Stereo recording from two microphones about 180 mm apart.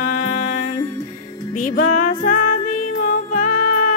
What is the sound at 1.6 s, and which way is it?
Music, 45° left (ahead or behind).